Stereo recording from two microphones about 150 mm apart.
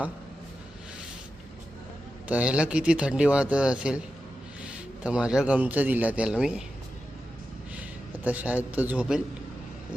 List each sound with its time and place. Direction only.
2.2 s a man's voice: 10° right (ahead or behind)
7.8 s a man's voice: 10° right (ahead or behind)